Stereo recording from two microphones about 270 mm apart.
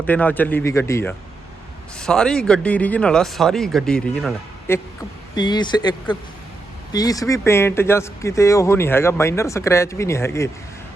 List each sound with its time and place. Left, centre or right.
0.0 s speech: centre
5.3 s speech: centre